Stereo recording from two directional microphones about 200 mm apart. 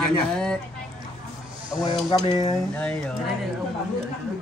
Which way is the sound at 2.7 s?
5° left (ahead or behind).